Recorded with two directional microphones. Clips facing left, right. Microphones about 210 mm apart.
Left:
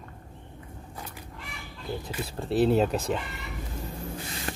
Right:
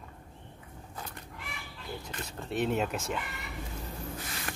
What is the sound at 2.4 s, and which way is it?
Speech, 35° left (ahead or behind).